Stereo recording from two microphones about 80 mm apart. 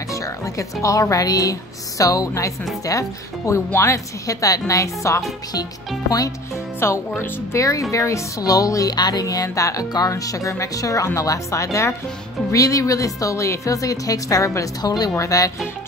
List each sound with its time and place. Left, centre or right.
0.1 s music: left
0.8 s speech: left
6.8 s speech: left
14.8 s speech: left